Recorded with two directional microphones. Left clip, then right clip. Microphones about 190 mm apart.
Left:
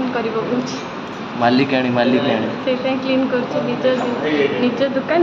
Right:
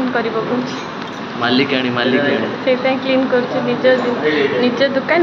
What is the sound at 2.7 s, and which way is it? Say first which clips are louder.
Speech: right 4 dB; 5° right (ahead or behind).